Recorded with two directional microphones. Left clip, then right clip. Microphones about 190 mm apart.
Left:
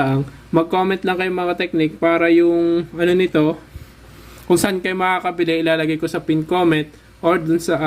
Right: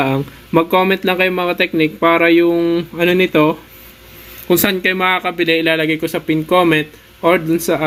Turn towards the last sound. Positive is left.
turn(degrees=10)  # may be behind; listen again after turning